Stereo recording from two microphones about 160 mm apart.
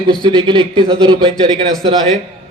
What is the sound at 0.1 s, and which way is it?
A man's voice, 30° right (ahead or behind).